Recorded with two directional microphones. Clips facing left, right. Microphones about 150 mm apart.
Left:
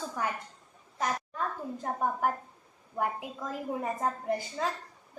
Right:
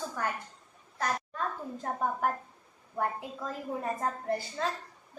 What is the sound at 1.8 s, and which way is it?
A woman's voice, 10° left (ahead or behind).